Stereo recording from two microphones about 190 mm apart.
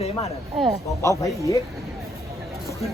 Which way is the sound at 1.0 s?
15° left (ahead or behind).